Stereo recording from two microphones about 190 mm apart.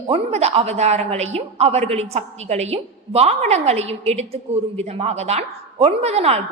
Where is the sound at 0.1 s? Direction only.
35° right (ahead or behind).